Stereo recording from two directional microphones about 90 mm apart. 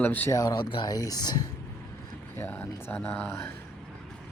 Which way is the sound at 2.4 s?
20° left (ahead or behind).